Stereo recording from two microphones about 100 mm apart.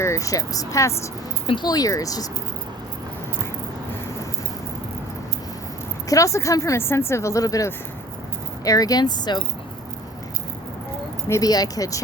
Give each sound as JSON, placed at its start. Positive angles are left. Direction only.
{"t": 0.0, "sound": "speech", "side_deg": 30}
{"t": 6.1, "sound": "speech", "side_deg": 35}
{"t": 11.3, "sound": "speech", "side_deg": 35}